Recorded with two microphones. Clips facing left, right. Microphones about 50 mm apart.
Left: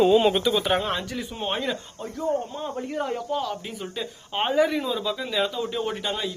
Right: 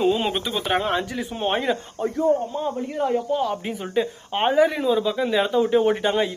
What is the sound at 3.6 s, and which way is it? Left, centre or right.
Speech, right.